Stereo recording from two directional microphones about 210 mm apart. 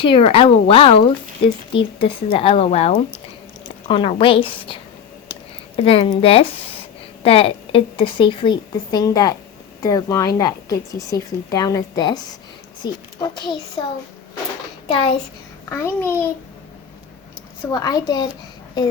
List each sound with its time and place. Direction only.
0.0 s a woman's voice: 25° left (ahead or behind)
15.7 s speech: 10° left (ahead or behind)
17.7 s a woman's voice: 20° left (ahead or behind)